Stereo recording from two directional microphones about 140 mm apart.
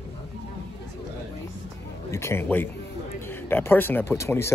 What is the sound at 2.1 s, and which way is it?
Speech, 20° left (ahead or behind).